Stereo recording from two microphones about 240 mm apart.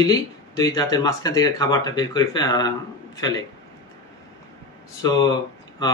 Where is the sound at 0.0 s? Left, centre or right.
Centre.